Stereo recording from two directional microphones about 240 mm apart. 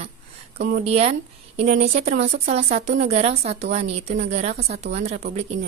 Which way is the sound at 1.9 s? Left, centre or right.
Right.